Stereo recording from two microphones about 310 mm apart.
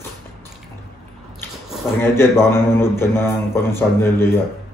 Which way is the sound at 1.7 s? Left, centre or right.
Centre.